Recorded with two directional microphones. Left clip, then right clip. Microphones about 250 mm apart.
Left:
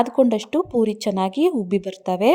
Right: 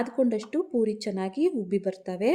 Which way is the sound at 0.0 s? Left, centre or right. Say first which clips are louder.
Left 8 dB; left.